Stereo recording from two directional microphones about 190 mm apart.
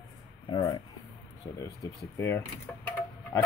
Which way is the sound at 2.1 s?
15° left (ahead or behind).